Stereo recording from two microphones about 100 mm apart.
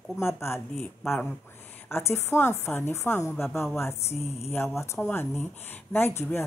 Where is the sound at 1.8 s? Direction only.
25° left (ahead or behind).